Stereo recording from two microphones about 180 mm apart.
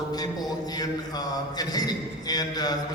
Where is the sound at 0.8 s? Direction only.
20° left (ahead or behind).